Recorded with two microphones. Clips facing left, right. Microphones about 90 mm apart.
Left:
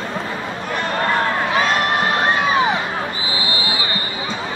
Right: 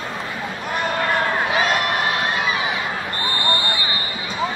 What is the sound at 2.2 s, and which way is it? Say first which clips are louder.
Crowd: left 5 dB; 35° left (ahead or behind).